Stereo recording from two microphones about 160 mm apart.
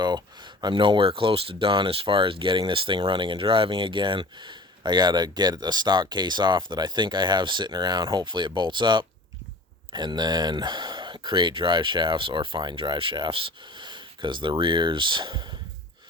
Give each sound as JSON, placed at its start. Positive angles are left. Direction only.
{"t": 0.0, "sound": "speech", "side_deg": -25}